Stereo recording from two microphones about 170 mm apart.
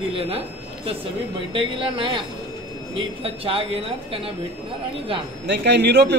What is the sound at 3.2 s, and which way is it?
Speech, 35° right (ahead or behind).